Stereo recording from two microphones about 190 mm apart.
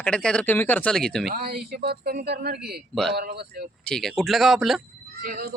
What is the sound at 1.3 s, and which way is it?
Speech, 55° right (ahead or behind).